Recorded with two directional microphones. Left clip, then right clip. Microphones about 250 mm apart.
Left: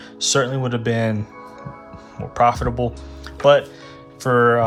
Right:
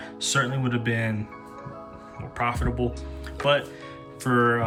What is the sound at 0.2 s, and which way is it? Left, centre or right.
Speech, centre.